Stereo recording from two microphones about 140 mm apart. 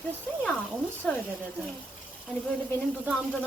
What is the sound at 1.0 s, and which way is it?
Speech, 5° left (ahead or behind).